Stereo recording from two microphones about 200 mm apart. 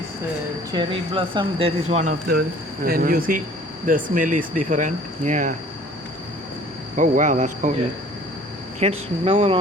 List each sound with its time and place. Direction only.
0.7 s speech: 25° right (ahead or behind)
2.8 s speech: 45° right (ahead or behind)
6.9 s speech: 40° right (ahead or behind)
8.8 s speech: 30° right (ahead or behind)